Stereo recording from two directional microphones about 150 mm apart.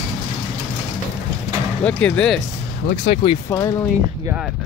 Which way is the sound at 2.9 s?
50° left (ahead or behind).